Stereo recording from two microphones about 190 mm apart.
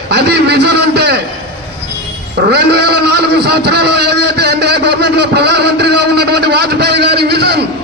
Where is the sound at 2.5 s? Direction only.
60° right (ahead or behind).